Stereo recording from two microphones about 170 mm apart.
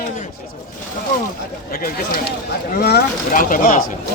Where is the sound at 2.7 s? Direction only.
65° left (ahead or behind).